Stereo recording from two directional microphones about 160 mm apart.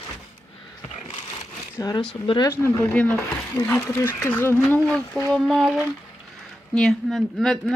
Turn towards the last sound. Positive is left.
turn(degrees=0)  # may be behind; listen again after turning